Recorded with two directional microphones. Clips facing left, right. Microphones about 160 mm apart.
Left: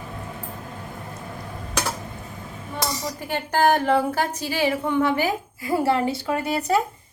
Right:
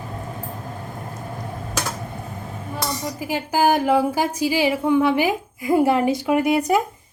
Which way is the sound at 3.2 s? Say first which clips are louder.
Right 1 dB; 5° right (ahead or behind).